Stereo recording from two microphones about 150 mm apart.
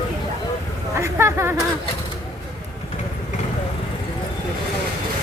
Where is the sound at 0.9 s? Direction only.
15° right (ahead or behind).